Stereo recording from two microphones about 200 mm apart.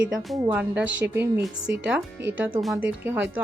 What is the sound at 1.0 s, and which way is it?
Speech, 60° right (ahead or behind).